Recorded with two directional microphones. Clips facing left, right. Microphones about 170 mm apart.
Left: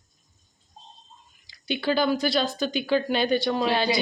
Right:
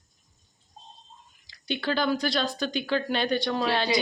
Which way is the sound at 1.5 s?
5° left (ahead or behind).